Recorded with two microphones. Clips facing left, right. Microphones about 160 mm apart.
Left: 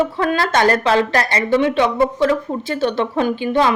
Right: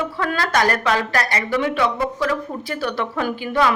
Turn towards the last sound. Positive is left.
turn(degrees=25)  # may be behind; listen again after turning